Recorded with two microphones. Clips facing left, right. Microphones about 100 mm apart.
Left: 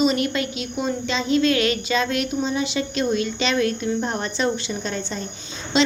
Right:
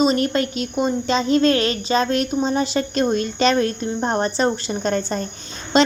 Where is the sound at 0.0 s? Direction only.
40° right (ahead or behind).